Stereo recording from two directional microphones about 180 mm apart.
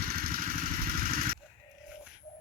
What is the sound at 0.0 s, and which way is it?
Motorcycle, 55° right (ahead or behind).